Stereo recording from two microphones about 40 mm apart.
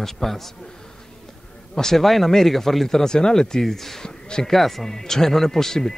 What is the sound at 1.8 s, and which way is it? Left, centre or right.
Speech, centre.